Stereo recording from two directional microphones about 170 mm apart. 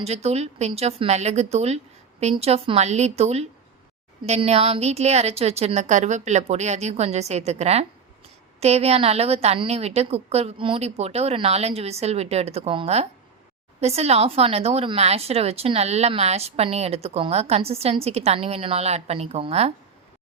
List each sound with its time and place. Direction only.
0.0 s speech: 40° right (ahead or behind)